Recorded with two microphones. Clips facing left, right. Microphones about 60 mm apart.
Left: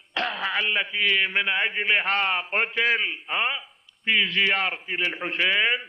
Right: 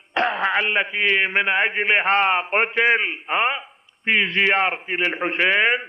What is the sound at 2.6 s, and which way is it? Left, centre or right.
A man's voice, right.